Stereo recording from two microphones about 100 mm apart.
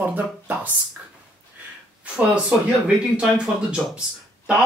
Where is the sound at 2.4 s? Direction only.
10° right (ahead or behind).